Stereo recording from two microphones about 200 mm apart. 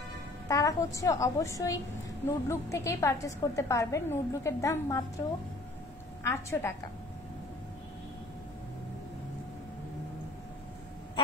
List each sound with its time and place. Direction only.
0.5 s a woman's voice: 15° left (ahead or behind)
6.2 s a woman's voice: 15° left (ahead or behind)